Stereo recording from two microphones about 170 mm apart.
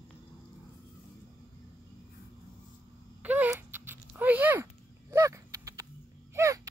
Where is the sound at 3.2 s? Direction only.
10° right (ahead or behind).